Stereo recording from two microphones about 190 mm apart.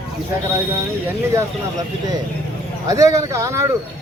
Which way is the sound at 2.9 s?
15° right (ahead or behind).